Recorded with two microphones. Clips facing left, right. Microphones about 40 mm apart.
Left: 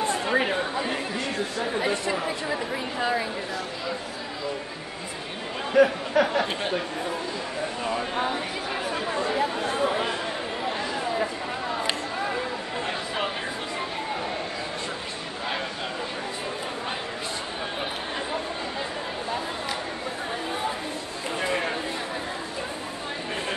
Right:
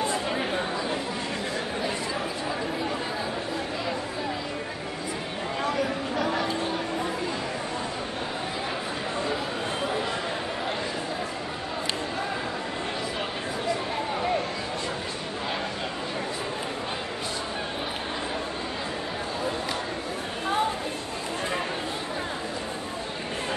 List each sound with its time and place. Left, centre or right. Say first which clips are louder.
0.1 s chatter: left 4 dB; left
5.8 s speech: left 7 dB; left